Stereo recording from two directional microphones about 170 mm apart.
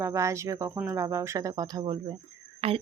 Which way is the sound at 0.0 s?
15° right (ahead or behind).